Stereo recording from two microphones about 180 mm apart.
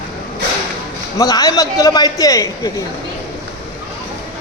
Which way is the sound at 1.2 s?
20° left (ahead or behind).